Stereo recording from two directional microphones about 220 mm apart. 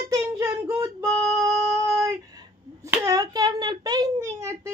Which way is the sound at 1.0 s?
5° left (ahead or behind).